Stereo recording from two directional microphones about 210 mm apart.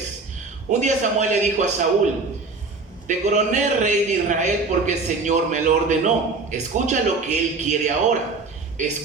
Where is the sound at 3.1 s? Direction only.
35° right (ahead or behind).